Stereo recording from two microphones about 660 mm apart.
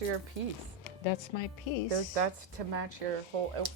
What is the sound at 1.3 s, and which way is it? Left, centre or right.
Speech, left.